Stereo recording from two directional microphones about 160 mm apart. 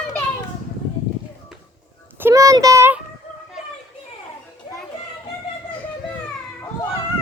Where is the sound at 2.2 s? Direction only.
15° right (ahead or behind).